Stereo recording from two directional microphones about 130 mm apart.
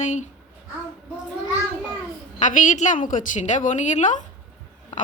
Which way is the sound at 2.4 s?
85° left.